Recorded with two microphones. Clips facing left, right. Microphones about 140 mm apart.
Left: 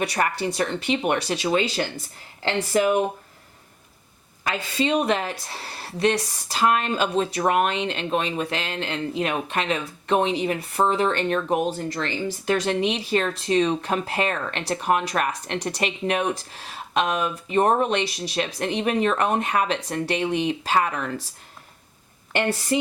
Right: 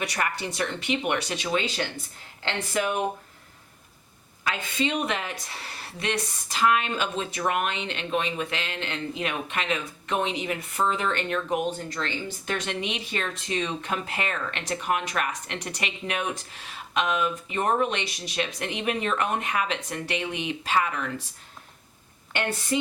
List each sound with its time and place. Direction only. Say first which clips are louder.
0.0 s speech: left 5 dB; 30° left (ahead or behind)
4.4 s speech: left 4 dB; 35° left (ahead or behind)